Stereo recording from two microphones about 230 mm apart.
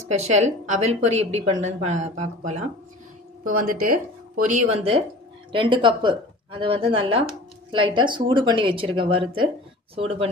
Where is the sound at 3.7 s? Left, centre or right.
Right.